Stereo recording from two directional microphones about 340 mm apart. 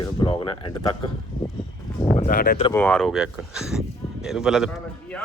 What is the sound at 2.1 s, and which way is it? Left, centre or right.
Speech, left.